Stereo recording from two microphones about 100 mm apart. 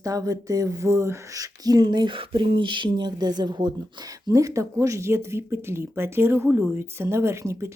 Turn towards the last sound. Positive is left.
turn(degrees=-30)  # may be behind; listen again after turning